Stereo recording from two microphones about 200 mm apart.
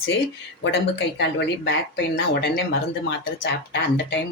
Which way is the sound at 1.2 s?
60° left (ahead or behind).